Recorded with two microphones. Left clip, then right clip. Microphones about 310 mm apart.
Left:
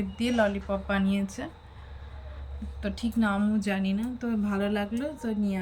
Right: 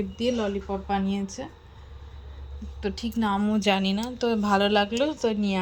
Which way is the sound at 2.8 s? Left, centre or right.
Centre.